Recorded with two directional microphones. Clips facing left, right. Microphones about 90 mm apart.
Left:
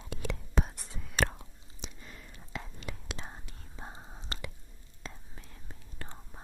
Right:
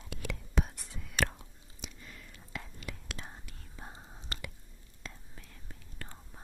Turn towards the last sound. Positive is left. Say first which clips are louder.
# left 2 dB
turn(degrees=25)  # may be behind; listen again after turning